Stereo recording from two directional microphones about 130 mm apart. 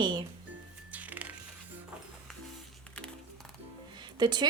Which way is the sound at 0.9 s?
10° right (ahead or behind).